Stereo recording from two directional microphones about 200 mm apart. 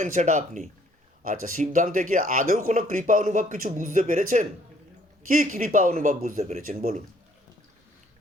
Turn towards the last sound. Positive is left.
turn(degrees=-40)  # may be behind; listen again after turning